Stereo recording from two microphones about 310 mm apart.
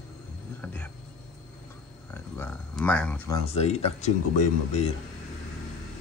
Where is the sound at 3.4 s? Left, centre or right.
Centre.